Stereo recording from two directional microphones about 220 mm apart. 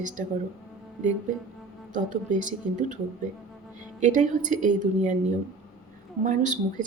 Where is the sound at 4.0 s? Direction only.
35° right (ahead or behind).